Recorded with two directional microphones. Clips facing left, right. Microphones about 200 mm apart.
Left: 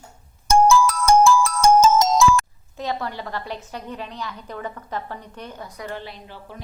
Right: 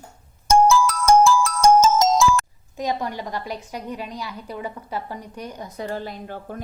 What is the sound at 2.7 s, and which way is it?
A woman's voice, 15° right (ahead or behind).